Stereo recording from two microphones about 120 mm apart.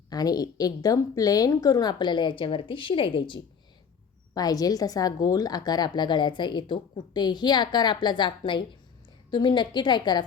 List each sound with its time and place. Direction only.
0.1 s a woman's voice: 35° left (ahead or behind)
4.4 s a woman's voice: 30° left (ahead or behind)